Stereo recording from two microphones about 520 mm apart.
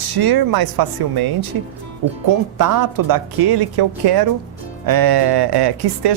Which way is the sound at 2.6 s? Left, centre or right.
Right.